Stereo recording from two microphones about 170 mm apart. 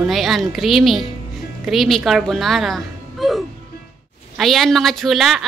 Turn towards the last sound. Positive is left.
turn(degrees=0)  # may be behind; listen again after turning